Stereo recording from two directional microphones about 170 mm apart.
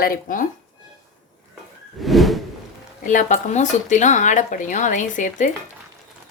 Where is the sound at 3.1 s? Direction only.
50° left (ahead or behind).